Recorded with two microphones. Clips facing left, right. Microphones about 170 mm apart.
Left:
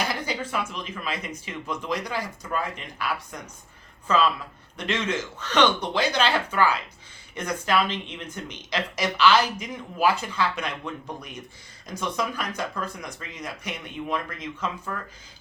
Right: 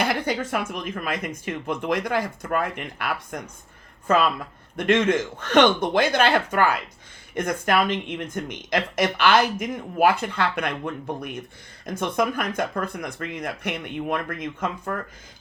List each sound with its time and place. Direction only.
0.0 s a woman's voice: 55° right (ahead or behind)